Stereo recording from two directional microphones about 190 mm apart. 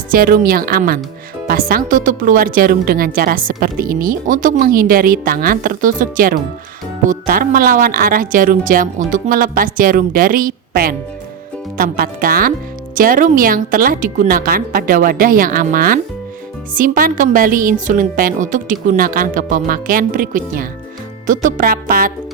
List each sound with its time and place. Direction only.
0.1 s speech: 50° right (ahead or behind)